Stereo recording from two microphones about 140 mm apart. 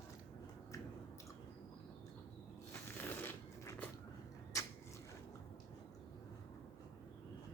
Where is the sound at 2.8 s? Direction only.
15° left (ahead or behind).